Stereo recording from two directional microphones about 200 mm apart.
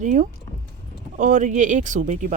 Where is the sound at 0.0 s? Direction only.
40° right (ahead or behind).